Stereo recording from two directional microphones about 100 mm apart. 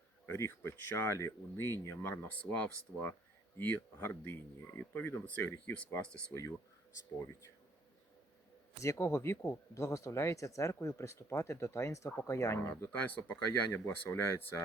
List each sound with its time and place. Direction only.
0.3 s speech: 25° left (ahead or behind); by 6.3 s 10° left (ahead or behind)
8.8 s speech: 30° left (ahead or behind)